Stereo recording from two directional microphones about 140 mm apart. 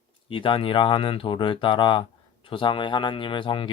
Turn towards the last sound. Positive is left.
turn(degrees=35)  # may be behind; listen again after turning